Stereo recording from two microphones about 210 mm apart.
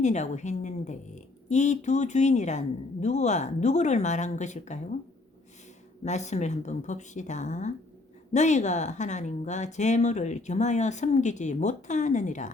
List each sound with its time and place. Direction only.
0.0 s a woman's voice: 35° left (ahead or behind)
6.0 s a woman's voice: 35° left (ahead or behind)